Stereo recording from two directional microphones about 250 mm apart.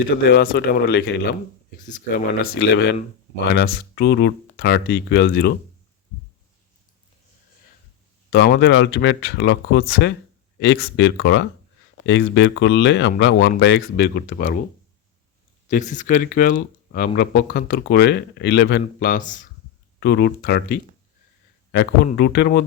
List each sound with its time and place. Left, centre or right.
0.3 s speech: left
8.3 s speech: left
15.7 s speech: left